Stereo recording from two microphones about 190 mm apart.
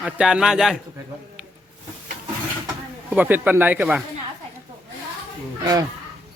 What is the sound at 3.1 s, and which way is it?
Speech, 10° right (ahead or behind).